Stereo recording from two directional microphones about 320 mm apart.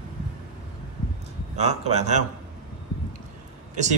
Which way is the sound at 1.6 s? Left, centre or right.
Centre.